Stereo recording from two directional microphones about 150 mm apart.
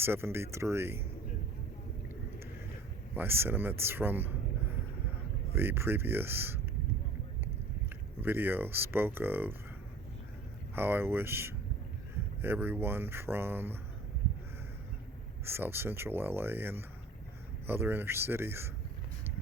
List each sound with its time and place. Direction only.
0.0 s speech: 15° right (ahead or behind)
3.2 s speech: 15° right (ahead or behind)
5.5 s speech: 15° right (ahead or behind)
8.2 s speech: 15° right (ahead or behind)
10.8 s speech: 15° right (ahead or behind)
15.4 s speech: 15° right (ahead or behind)